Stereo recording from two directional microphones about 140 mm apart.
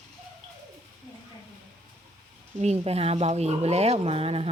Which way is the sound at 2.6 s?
50° right (ahead or behind).